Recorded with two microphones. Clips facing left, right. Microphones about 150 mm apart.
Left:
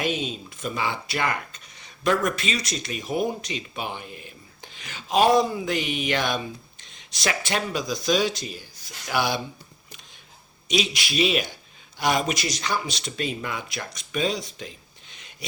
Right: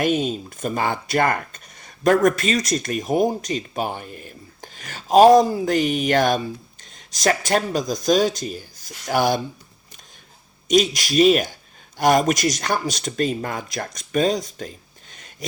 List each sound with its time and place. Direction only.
0.0 s speech: 50° right (ahead or behind)
10.7 s speech: 45° right (ahead or behind)
15.1 s a sound: 45° right (ahead or behind)